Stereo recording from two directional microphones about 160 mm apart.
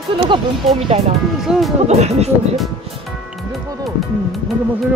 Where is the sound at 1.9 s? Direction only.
45° right (ahead or behind).